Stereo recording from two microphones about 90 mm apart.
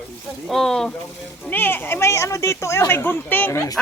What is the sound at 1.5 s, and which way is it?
Speech, 20° left (ahead or behind).